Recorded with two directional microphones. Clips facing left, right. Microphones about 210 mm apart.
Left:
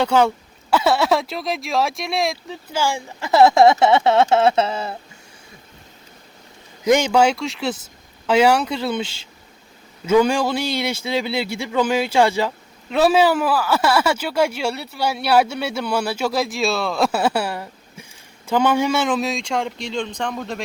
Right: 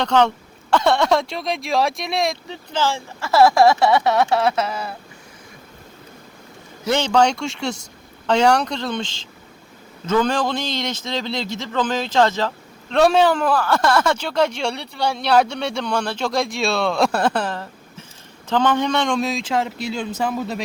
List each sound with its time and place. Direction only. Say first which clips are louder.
0.0 s speech: left 1 dB; 10° left (ahead or behind)
2.8 s speech: right 1 dB; 15° left (ahead or behind)
6.8 s a man's voice: left 2 dB; 10° left (ahead or behind); by 20.6 s 5° right (ahead or behind)